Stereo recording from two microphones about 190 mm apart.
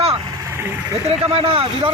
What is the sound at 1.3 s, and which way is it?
Speech, 30° right (ahead or behind).